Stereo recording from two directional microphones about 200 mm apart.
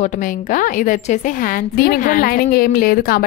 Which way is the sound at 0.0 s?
40° left (ahead or behind).